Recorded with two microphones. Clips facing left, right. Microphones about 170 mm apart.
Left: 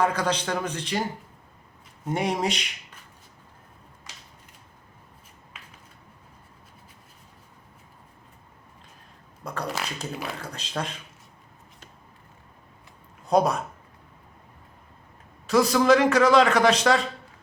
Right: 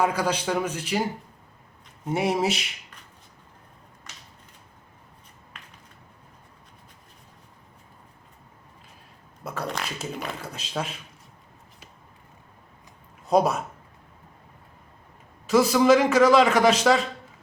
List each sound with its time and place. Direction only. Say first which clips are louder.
0.0 s a man's voice: even; 10° right (ahead or behind)
2.0 s speech: right 2 dB; 5° right (ahead or behind)
9.4 s speech: even; centre (ahead or behind)
13.2 s speech: even; centre (ahead or behind)
15.4 s speech: right 1 dB; 5° right (ahead or behind)